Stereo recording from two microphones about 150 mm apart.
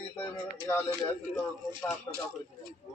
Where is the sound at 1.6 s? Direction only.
25° right (ahead or behind).